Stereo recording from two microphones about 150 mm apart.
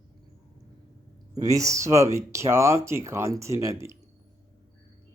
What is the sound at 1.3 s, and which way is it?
Speech, 20° right (ahead or behind).